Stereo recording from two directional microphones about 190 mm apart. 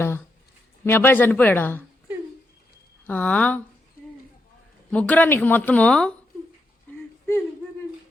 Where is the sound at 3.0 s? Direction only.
10° left (ahead or behind).